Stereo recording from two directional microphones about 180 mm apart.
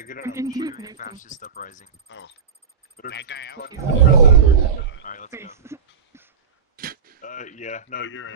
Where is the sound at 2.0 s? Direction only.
90° left.